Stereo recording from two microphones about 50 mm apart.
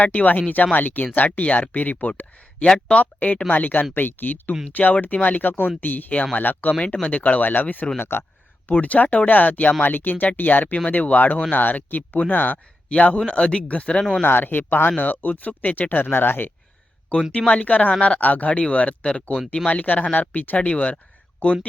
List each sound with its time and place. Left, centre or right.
0.0 s speech: left
2.6 s speech: left
6.7 s speech: left
7.9 s speech: left
8.7 s speech: left
12.9 s speech: left
14.2 s speech: left
17.3 s speech: left
20.6 s speech: left